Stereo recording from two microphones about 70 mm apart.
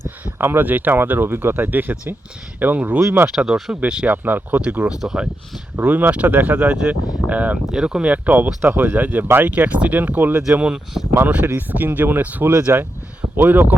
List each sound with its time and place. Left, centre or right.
0.3 s speech: right
3.0 s speech: right
3.2 s speech: centre
5.7 s speech: right
7.7 s speech: centre
8.1 s speech: right
10.5 s speech: centre
11.7 s speech: right
12.7 s speech: right
13.3 s speech: right